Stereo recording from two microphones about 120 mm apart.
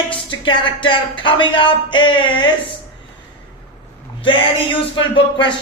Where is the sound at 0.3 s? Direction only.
40° left (ahead or behind).